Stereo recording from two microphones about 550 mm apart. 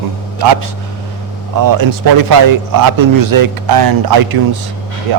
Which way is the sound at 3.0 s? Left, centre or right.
Right.